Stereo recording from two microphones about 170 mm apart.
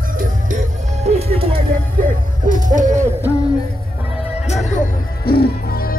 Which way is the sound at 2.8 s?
45° right (ahead or behind).